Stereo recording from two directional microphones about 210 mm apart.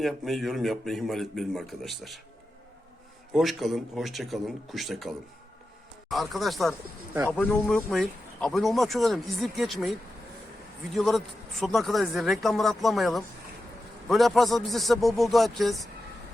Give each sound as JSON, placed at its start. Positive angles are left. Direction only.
{"t": 0.0, "sound": "speech", "side_deg": 0}
{"t": 3.3, "sound": "speech", "side_deg": 0}
{"t": 10.9, "sound": "speech", "side_deg": 0}